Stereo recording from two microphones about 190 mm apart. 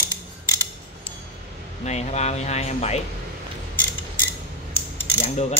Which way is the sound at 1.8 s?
35° left (ahead or behind).